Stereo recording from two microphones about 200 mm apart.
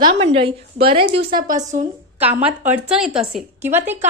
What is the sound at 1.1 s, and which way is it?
Speech, 45° right (ahead or behind).